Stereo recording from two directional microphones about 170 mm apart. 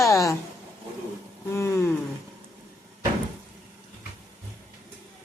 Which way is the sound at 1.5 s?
15° left (ahead or behind).